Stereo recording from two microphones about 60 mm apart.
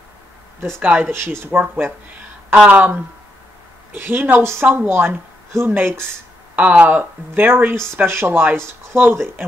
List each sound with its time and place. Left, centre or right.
0.7 s a woman's voice: right
1.1 s a woman's voice: right
6.5 s a woman's voice: right